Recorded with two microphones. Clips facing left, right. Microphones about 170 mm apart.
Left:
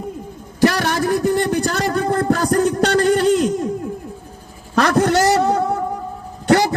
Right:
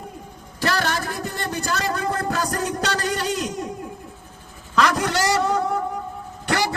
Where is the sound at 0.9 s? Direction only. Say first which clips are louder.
Left 11 dB; 15° left (ahead or behind).